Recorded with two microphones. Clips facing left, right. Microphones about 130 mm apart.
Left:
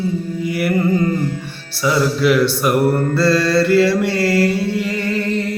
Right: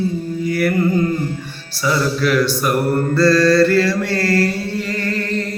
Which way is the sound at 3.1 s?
25° left (ahead or behind).